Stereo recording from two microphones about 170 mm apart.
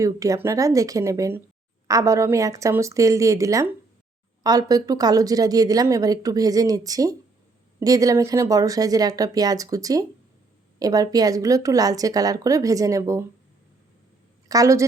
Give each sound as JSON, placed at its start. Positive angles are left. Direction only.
{"t": 0.0, "sound": "a woman's voice", "side_deg": -20}
{"t": 14.4, "sound": "a woman's voice", "side_deg": -20}